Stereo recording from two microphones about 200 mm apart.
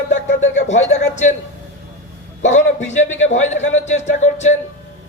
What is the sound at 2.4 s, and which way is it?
Speech, 35° left (ahead or behind).